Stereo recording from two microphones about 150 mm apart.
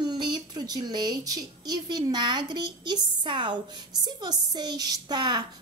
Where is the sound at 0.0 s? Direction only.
30° right (ahead or behind).